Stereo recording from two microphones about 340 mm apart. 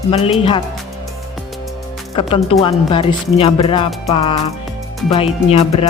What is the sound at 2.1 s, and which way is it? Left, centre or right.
Speech, centre.